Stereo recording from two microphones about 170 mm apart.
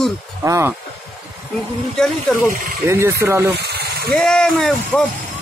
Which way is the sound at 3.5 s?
75° right (ahead or behind).